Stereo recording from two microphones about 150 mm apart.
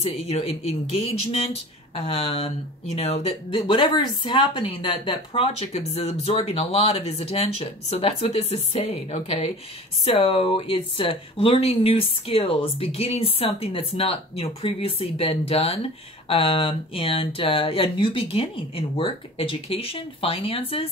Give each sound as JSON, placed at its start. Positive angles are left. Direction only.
{"t": 0.0, "sound": "speech", "side_deg": 45}